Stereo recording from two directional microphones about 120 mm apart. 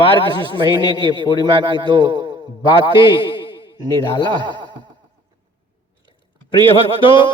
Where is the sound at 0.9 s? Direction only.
40° right (ahead or behind).